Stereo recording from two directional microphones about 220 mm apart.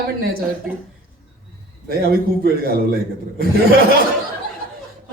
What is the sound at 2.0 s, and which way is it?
Speech, 45° right (ahead or behind).